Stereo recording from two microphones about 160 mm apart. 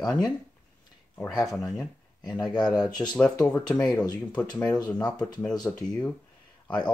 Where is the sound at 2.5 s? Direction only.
25° left (ahead or behind).